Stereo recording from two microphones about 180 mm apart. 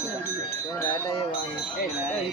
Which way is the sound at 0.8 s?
20° left (ahead or behind).